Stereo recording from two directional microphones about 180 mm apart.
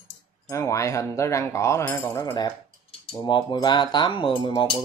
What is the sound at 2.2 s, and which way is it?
Speech, 25° left (ahead or behind).